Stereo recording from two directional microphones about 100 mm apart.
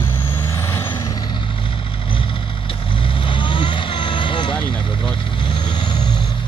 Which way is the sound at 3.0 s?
60° left (ahead or behind).